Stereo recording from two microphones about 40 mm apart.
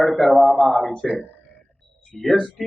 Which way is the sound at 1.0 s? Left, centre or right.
Centre.